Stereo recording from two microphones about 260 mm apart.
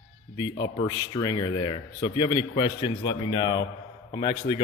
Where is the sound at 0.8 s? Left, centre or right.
Centre.